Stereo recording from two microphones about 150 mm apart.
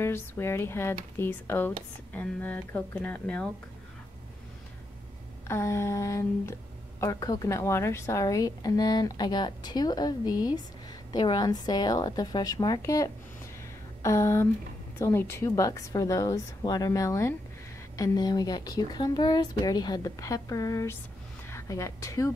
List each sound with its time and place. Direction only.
0.0 s speech: 15° left (ahead or behind)
5.5 s a woman's voice: 20° left (ahead or behind)